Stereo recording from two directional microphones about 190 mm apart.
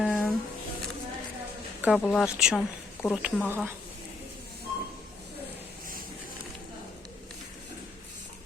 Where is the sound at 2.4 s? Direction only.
5° right (ahead or behind).